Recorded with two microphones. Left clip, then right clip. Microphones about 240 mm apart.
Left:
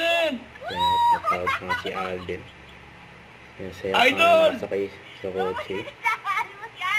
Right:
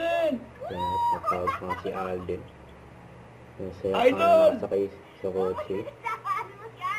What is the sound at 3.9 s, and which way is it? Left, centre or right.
A man's voice, centre.